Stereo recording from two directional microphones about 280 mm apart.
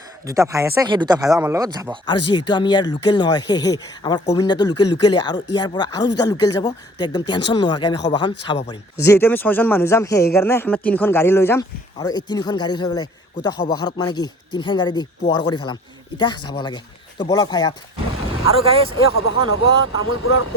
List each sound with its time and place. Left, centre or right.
0.3 s speech: centre
2.5 s a man's voice: centre
18.4 s speech: centre
19.2 s speech: left